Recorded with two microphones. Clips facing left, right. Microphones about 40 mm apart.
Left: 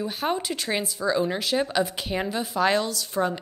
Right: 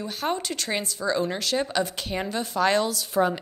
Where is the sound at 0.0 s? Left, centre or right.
Centre.